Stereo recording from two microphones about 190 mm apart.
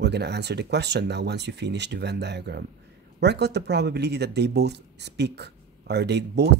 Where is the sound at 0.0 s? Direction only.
60° right (ahead or behind).